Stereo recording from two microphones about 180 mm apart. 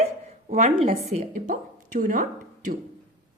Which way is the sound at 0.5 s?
40° right (ahead or behind).